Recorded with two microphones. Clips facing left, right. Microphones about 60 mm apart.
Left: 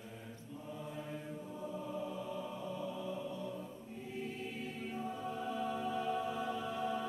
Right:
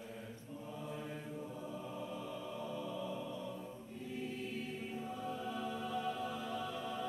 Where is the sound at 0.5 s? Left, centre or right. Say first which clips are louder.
Even; centre.